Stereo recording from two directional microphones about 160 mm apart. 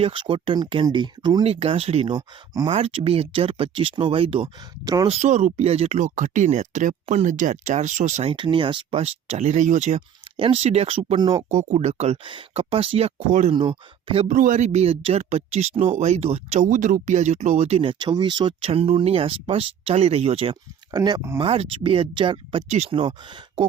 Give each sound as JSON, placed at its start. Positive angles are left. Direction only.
{"t": 0.0, "sound": "speech", "side_deg": -30}
{"t": 1.5, "sound": "speech", "side_deg": -35}
{"t": 2.1, "sound": "speech", "side_deg": -25}
{"t": 2.7, "sound": "speech", "side_deg": -40}
{"t": 5.0, "sound": "speech", "side_deg": -45}
{"t": 8.3, "sound": "speech", "side_deg": -30}
{"t": 10.3, "sound": "speech", "side_deg": -35}
{"t": 11.2, "sound": "speech", "side_deg": -25}
{"t": 11.4, "sound": "speech", "side_deg": -45}
{"t": 13.5, "sound": "speech", "side_deg": -35}
{"t": 14.3, "sound": "speech", "side_deg": -55}
{"t": 16.6, "sound": "speech", "side_deg": -55}
{"t": 20.9, "sound": "speech", "side_deg": -25}
{"t": 21.3, "sound": "speech", "side_deg": -35}